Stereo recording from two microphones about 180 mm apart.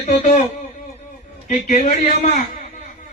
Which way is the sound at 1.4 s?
40° left (ahead or behind).